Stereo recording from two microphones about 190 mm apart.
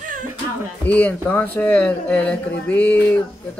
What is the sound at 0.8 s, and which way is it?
Speech, 10° left (ahead or behind).